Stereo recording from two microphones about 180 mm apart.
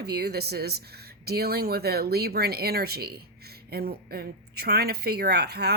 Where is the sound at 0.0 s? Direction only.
60° right (ahead or behind).